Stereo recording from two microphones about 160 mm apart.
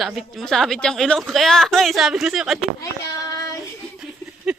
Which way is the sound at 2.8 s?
20° left (ahead or behind).